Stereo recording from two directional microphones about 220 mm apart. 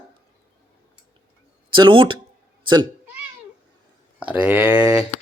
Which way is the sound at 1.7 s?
20° right (ahead or behind).